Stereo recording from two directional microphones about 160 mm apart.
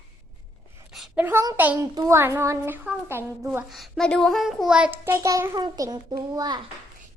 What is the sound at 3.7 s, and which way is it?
A child's voice, centre (ahead or behind).